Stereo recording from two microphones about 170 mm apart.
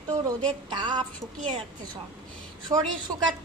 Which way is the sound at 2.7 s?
30° right (ahead or behind).